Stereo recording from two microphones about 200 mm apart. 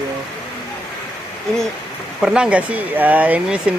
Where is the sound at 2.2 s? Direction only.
5° right (ahead or behind).